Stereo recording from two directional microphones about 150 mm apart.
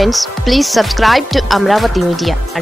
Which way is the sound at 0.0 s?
Centre (ahead or behind).